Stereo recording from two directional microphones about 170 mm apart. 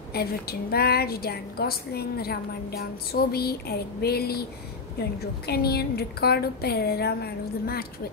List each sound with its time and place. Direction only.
0.1 s a woman's voice: 65° left (ahead or behind)